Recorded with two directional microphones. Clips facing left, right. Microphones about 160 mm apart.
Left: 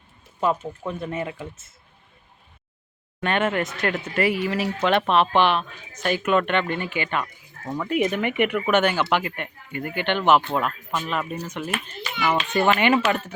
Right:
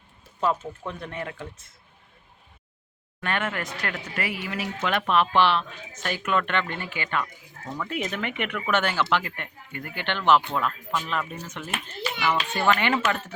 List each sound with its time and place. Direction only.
0.3 s speech: 10° left (ahead or behind)
3.2 s speech: 20° left (ahead or behind)